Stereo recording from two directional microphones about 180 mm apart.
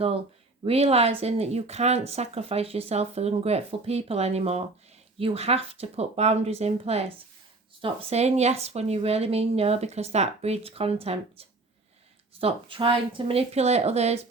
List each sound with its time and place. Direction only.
0.6 s speech: 35° right (ahead or behind)